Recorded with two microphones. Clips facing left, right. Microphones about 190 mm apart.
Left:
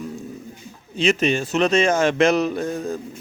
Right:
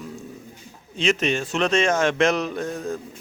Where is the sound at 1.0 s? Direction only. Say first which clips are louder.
Left 3 dB; centre (ahead or behind).